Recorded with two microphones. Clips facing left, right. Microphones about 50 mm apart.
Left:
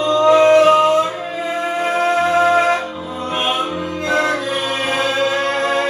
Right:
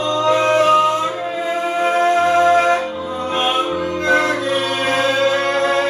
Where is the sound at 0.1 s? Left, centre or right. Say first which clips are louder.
Left 5 dB; left.